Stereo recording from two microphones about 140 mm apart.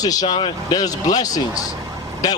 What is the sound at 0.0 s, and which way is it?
A man's voice, 25° left (ahead or behind).